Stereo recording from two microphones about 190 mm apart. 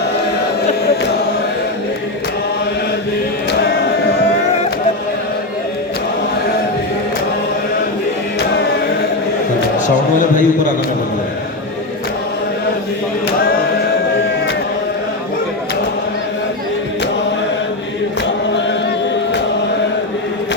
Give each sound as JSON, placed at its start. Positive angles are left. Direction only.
{"t": 9.9, "sound": "a man's voice", "side_deg": 40}